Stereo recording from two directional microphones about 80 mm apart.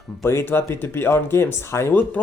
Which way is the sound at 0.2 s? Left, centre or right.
Left.